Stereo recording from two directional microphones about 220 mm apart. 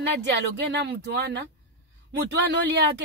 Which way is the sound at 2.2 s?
50° right (ahead or behind).